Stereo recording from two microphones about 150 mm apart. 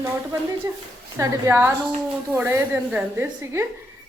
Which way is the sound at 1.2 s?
15° right (ahead or behind).